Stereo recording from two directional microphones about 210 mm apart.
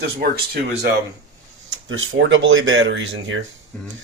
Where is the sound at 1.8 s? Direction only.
70° right (ahead or behind).